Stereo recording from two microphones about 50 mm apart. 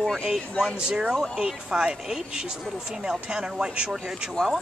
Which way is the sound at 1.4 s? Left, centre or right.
Centre.